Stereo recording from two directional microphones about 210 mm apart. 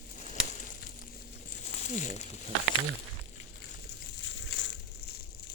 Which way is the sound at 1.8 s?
35° left (ahead or behind).